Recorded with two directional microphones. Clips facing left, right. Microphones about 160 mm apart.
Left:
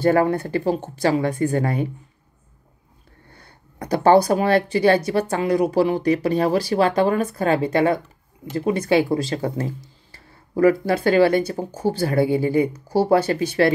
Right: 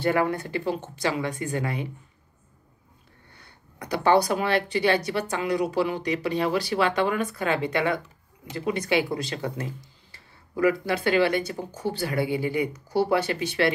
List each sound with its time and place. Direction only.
0.0 s speech: 40° left (ahead or behind)
3.8 s speech: 40° left (ahead or behind)